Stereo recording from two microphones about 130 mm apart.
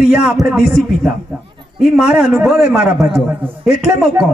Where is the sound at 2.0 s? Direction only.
10° right (ahead or behind).